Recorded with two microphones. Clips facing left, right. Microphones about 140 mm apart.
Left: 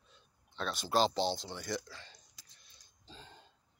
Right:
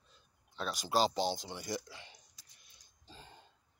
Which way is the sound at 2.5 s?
10° right (ahead or behind).